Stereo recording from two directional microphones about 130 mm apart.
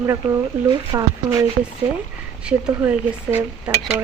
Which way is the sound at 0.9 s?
30° right (ahead or behind).